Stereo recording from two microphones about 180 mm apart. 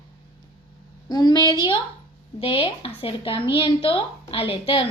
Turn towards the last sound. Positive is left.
turn(degrees=30)  # may be behind; listen again after turning